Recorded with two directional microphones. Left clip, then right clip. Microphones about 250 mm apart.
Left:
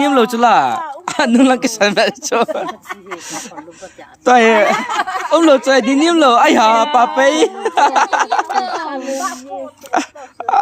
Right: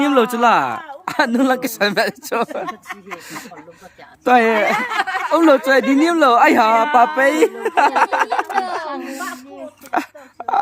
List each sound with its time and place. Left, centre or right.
0.0 s speech: centre
1.0 s speech: centre
2.6 s speech: centre
4.2 s speech: centre
4.9 s speech: centre
5.3 s speech: centre
9.9 s wail: centre